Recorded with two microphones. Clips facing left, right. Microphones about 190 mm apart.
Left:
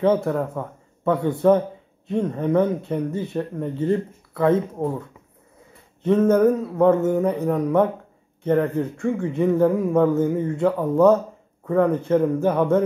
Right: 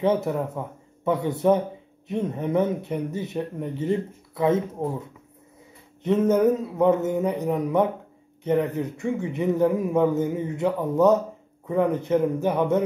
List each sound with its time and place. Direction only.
0.0 s speech: 20° right (ahead or behind)
6.0 s speech: 15° right (ahead or behind)